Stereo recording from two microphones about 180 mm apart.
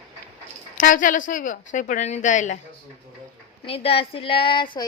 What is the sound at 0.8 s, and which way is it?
A woman's voice, 45° left (ahead or behind).